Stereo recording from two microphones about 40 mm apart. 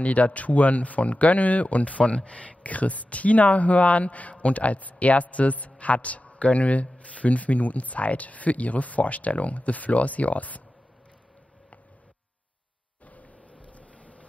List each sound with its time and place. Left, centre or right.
0.0 s speech: left
13.0 s a sound: left
13.4 s boat: left